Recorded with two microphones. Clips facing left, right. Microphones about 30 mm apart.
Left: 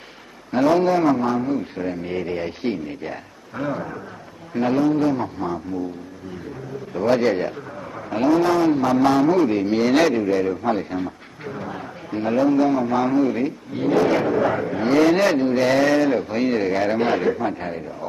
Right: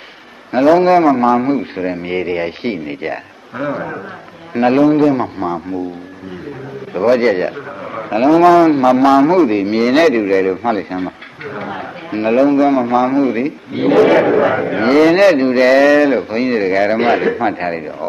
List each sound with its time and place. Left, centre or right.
0.5 s a man's voice: right
3.5 s speech: right
4.6 s a man's voice: right
6.9 s a man's voice: right
8.4 s a man's voice: right
10.2 s a man's voice: right
13.7 s a man's voice: right
17.4 s speech: right